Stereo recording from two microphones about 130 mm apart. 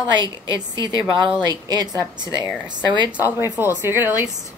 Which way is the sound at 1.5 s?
30° right (ahead or behind).